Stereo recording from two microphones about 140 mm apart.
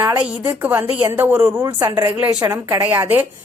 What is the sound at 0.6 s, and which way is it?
A woman's voice, 15° right (ahead or behind).